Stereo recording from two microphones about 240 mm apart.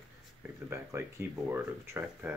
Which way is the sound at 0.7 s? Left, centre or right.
Centre.